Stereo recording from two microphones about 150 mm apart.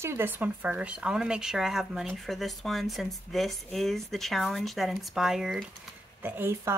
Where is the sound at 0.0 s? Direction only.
15° right (ahead or behind).